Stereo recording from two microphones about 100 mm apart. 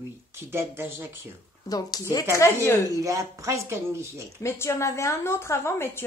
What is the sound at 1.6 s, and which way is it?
A woman's voice, 40° left (ahead or behind).